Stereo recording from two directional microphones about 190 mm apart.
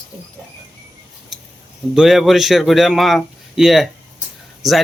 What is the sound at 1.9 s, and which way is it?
Speech, centre (ahead or behind).